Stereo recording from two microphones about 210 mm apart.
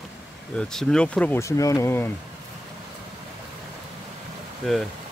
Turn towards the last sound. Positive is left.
turn(degrees=0)  # may be behind; listen again after turning